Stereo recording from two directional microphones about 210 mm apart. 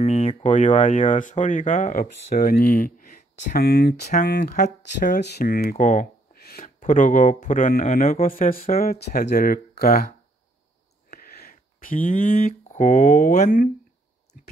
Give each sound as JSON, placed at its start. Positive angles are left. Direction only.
{"t": 0.0, "sound": "speech", "side_deg": 35}
{"t": 5.1, "sound": "speech", "side_deg": 50}
{"t": 11.1, "sound": "a sound", "side_deg": 45}
{"t": 12.7, "sound": "speech", "side_deg": 30}